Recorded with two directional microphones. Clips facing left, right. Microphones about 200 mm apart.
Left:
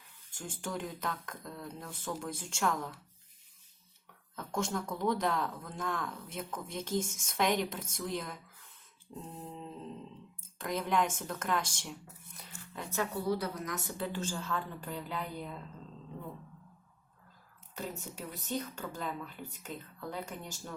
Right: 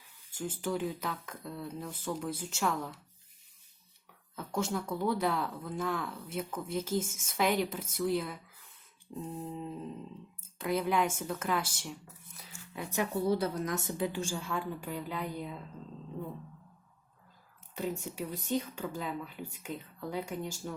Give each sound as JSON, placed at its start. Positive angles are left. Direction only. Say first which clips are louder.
{"t": 0.3, "sound": "a woman's voice", "louder": "right 6 dB", "side_deg": -5}
{"t": 4.4, "sound": "a woman's voice", "louder": "right 1 dB", "side_deg": -5}
{"t": 9.2, "sound": "a sound", "louder": "right 6 dB", "side_deg": -5}
{"t": 10.4, "sound": "a woman's voice", "louder": "right 5 dB", "side_deg": -5}
{"t": 12.4, "sound": "a sound", "louder": "right 2 dB", "side_deg": -10}
{"t": 13.2, "sound": "a woman's voice", "louder": "right 4 dB", "side_deg": -25}
{"t": 14.0, "sound": "a woman's voice", "louder": "right 3 dB", "side_deg": -15}
{"t": 18.4, "sound": "a woman's voice", "louder": "right 3 dB", "side_deg": -10}